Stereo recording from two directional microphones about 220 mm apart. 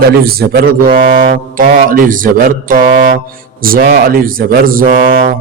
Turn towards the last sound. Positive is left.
turn(degrees=-40)  # may be behind; listen again after turning